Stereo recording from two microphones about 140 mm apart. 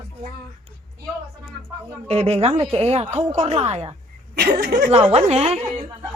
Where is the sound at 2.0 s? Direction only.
50° right (ahead or behind).